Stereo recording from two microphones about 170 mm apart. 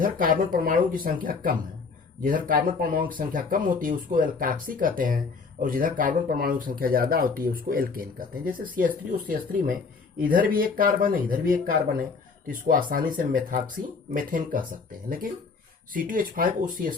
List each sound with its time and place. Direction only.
0.0 s speech: 55° right (ahead or behind)